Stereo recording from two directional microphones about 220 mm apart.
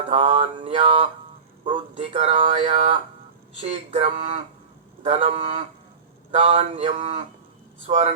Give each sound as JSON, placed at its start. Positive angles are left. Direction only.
{"t": 0.1, "sound": "speech", "side_deg": -25}